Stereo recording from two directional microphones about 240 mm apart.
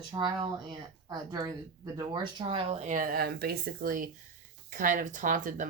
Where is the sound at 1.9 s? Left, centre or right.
Centre.